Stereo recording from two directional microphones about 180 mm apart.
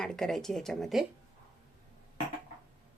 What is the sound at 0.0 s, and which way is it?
Speech, centre (ahead or behind).